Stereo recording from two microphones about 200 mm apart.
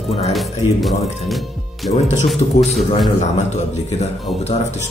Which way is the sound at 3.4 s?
35° left (ahead or behind).